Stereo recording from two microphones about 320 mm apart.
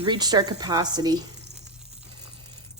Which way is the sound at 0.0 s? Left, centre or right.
Centre.